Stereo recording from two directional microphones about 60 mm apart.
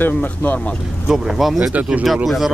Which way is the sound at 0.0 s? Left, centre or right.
Left.